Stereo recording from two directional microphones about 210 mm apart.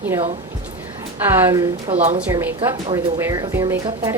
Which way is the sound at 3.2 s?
15° right (ahead or behind).